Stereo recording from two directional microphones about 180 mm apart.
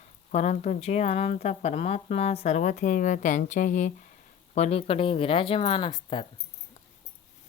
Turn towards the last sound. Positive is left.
turn(degrees=25)  # may be behind; listen again after turning